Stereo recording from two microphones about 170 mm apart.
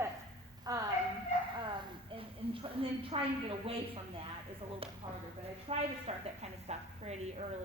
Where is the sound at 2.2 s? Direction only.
30° right (ahead or behind).